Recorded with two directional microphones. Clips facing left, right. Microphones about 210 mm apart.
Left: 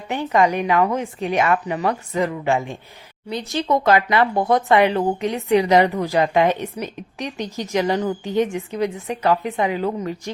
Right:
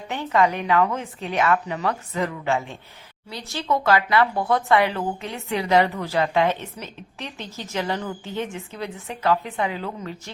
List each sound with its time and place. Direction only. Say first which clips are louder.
0.1 s a woman's voice: left 3 dB; 15° left (ahead or behind)